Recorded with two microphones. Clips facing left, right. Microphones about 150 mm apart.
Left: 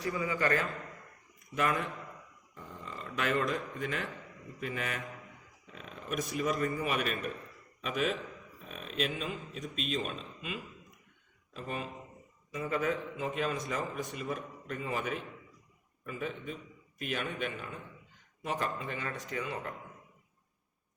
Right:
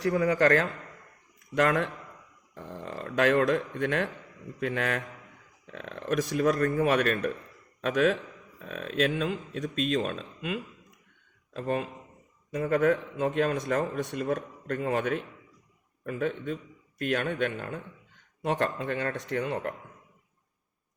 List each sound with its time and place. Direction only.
0.0 s a man's voice: 85° right
8.6 s a man's voice: 75° right (ahead or behind)
13.1 s speech: 65° right (ahead or behind)
13.9 s speech: 80° right
18.4 s a man's voice: 85° right
18.8 s speech: 70° right (ahead or behind)